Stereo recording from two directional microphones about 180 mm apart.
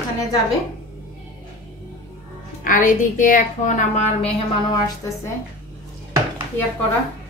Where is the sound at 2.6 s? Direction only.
45° left (ahead or behind).